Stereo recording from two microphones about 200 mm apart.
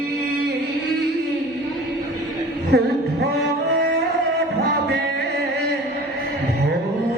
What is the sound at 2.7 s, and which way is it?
Music, 55° right (ahead or behind).